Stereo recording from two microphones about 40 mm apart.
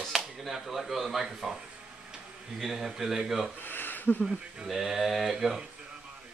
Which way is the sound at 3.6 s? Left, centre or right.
Left.